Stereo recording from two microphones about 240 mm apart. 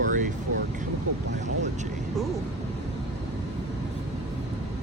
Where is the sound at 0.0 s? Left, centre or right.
Right.